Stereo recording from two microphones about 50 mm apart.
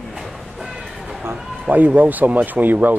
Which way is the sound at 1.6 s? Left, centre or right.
Right.